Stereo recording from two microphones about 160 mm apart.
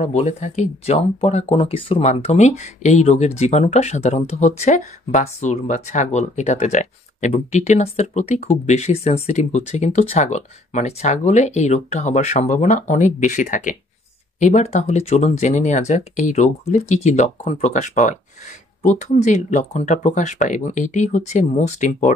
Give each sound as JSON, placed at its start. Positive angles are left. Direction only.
{"t": 0.0, "sound": "speech", "side_deg": 45}